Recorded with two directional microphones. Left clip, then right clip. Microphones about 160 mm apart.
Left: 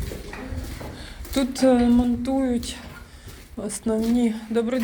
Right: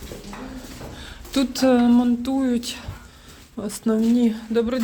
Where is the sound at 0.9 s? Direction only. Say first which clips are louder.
Right 2 dB; 50° right (ahead or behind).